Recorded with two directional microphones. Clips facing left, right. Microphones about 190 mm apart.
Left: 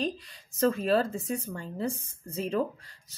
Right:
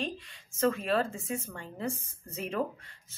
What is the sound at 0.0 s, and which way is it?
Speech, 35° left (ahead or behind).